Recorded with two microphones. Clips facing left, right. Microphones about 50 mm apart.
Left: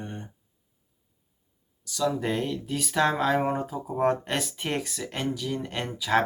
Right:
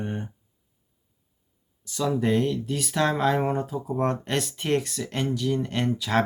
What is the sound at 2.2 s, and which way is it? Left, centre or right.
Speech, centre.